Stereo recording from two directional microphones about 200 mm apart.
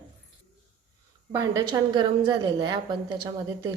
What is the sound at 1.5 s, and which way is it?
A woman's voice, 25° right (ahead or behind).